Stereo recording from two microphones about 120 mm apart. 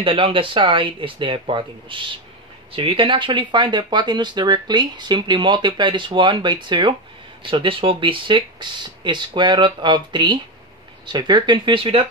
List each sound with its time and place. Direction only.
0.0 s speech: 45° right (ahead or behind)